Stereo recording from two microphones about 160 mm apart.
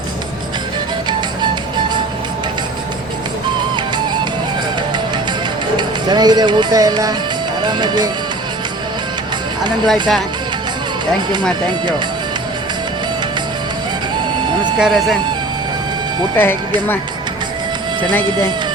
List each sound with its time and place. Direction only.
3.8 s music: 30° right (ahead or behind)
5.7 s speech: 25° right (ahead or behind)
9.8 s speech: centre (ahead or behind)
11.7 s speech: 30° right (ahead or behind)
14.8 s speech: centre (ahead or behind)
16.3 s speech: 15° left (ahead or behind)
18.3 s speech: 30° right (ahead or behind)